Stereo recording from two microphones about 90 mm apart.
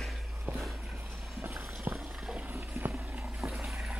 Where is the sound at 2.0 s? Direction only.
5° right (ahead or behind).